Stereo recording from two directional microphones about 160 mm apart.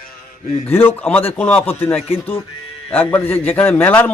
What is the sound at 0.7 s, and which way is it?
A man's voice, 15° left (ahead or behind).